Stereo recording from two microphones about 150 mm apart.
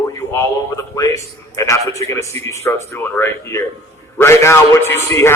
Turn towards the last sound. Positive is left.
turn(degrees=20)  # may be behind; listen again after turning